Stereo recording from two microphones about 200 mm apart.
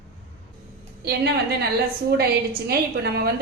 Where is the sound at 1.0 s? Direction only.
55° right (ahead or behind).